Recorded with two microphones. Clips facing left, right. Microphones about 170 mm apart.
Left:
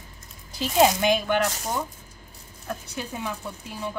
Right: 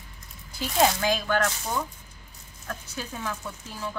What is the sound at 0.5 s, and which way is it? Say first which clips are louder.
Speech: left 4 dB; 20° left (ahead or behind).